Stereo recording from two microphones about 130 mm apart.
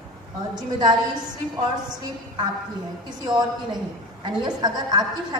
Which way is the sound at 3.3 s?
35° right (ahead or behind).